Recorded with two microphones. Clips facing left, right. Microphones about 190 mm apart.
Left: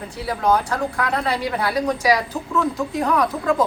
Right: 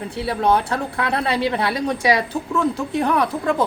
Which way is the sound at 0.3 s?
30° right (ahead or behind).